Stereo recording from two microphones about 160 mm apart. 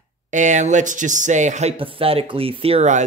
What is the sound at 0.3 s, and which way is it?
Speech, 50° right (ahead or behind).